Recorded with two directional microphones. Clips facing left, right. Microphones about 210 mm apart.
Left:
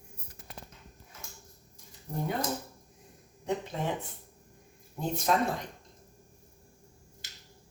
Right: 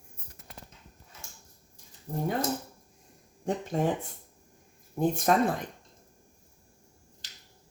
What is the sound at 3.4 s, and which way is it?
Speech, 45° right (ahead or behind).